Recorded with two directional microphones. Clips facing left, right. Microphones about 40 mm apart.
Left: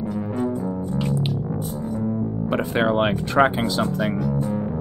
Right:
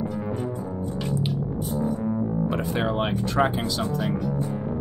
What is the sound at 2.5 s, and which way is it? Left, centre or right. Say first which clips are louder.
Speech: left 5 dB; left.